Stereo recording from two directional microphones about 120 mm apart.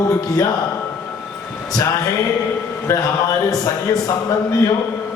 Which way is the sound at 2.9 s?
25° left (ahead or behind).